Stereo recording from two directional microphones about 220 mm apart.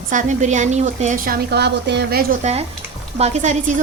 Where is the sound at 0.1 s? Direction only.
35° right (ahead or behind).